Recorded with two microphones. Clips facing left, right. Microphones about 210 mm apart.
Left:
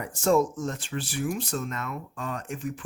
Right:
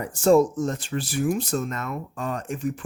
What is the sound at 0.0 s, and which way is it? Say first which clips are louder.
Speech: right 5 dB; 35° right (ahead or behind).